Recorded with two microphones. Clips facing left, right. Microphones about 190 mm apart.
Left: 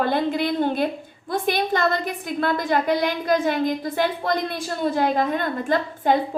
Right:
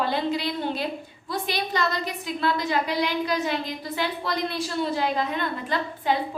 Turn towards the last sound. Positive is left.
turn(degrees=50)  # may be behind; listen again after turning